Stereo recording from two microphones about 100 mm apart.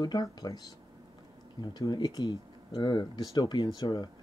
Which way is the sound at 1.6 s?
45° left (ahead or behind).